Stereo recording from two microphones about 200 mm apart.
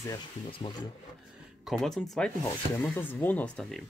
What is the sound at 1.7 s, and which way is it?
Speech, centre (ahead or behind).